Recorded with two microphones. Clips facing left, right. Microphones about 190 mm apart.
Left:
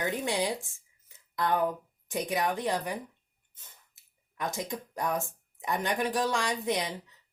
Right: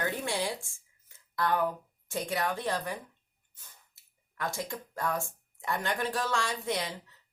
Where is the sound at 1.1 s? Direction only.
20° left (ahead or behind).